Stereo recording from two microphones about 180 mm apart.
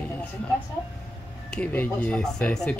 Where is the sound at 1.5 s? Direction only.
5° left (ahead or behind).